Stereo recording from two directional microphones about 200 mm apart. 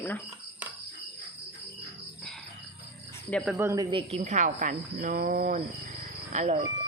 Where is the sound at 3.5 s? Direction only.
15° right (ahead or behind); by 6.6 s 35° right (ahead or behind).